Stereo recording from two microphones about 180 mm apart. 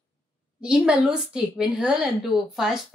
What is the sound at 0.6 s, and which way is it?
A woman's voice, 5° right (ahead or behind).